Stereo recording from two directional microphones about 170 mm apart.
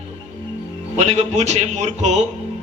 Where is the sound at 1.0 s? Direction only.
40° right (ahead or behind).